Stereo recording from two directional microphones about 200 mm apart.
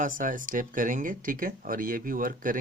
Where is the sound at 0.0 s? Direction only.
40° right (ahead or behind).